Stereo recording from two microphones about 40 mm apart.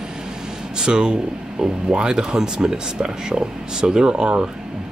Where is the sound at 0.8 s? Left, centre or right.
Right.